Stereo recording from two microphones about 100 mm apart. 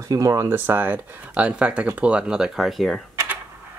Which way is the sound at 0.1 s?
35° right (ahead or behind).